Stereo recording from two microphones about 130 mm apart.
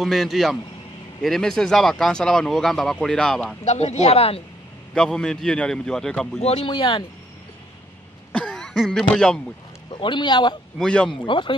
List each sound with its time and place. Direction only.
0.0 s speech: centre (ahead or behind)
3.6 s speech: 60° left (ahead or behind)
4.9 s speech: 5° left (ahead or behind)
6.4 s speech: 45° left (ahead or behind)
8.3 s speech: 10° left (ahead or behind)
9.8 s speech: 40° left (ahead or behind)
10.8 s speech: 10° left (ahead or behind)
11.1 s speech: 40° left (ahead or behind)